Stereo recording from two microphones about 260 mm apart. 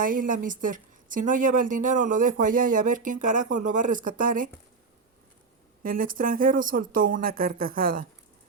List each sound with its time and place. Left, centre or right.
0.0 s a woman's voice: right
5.8 s a woman's voice: right